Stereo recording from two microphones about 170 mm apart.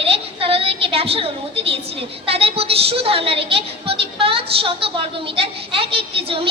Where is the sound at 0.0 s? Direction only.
35° right (ahead or behind).